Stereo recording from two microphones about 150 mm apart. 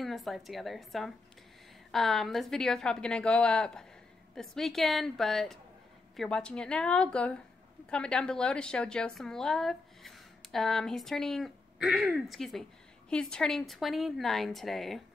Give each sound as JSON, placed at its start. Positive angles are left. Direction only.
{"t": 0.0, "sound": "a woman's voice", "side_deg": 0}